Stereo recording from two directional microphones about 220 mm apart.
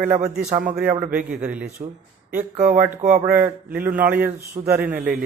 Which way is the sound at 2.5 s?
35° right (ahead or behind).